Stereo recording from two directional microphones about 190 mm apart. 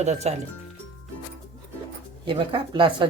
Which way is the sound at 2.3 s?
25° right (ahead or behind).